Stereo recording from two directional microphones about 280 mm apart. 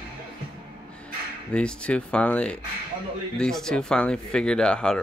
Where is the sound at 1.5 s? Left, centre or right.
Centre.